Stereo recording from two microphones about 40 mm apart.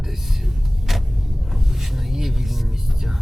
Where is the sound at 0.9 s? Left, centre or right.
Centre.